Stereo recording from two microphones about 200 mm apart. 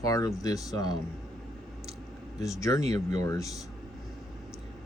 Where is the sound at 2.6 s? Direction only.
15° left (ahead or behind).